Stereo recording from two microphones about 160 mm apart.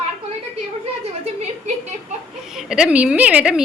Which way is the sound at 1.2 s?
40° right (ahead or behind).